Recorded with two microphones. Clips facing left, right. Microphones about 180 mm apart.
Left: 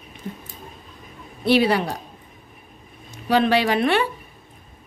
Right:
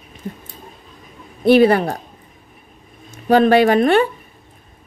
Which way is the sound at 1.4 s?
50° right (ahead or behind).